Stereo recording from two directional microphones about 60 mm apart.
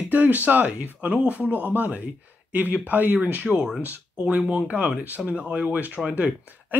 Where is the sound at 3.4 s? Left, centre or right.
Centre.